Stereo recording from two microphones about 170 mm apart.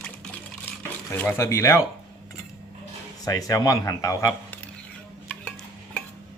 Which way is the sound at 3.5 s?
20° left (ahead or behind).